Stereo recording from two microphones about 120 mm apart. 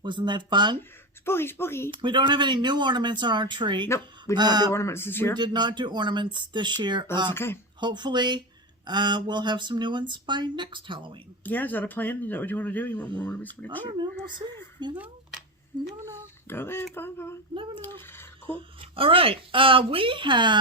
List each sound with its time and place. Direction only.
0.0 s speech: 40° right (ahead or behind)
0.8 s speech: 20° left (ahead or behind)
2.0 s speech: 40° right (ahead or behind)
3.8 s speech: 25° left (ahead or behind)
4.4 s speech: 35° right (ahead or behind)
4.7 s speech: 20° left (ahead or behind)
5.4 s speech: 40° right (ahead or behind)
7.3 s speech: 20° left (ahead or behind)
7.8 s speech: 40° right (ahead or behind)
11.4 s a man's voice: 15° left (ahead or behind)
13.8 s speech: 40° right (ahead or behind)
16.0 s speech: 20° right (ahead or behind)
16.5 s speech: 20° left (ahead or behind)
18.5 s speech: 50° right (ahead or behind)